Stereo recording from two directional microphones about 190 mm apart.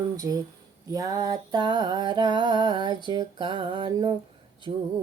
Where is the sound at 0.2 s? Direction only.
20° right (ahead or behind).